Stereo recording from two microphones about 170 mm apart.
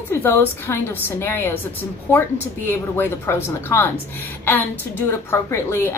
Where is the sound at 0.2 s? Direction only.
15° left (ahead or behind).